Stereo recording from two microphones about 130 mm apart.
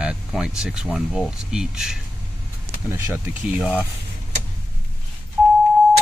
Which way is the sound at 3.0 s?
15° right (ahead or behind).